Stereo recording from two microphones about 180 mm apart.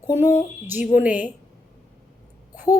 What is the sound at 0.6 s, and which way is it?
Speech, 10° right (ahead or behind).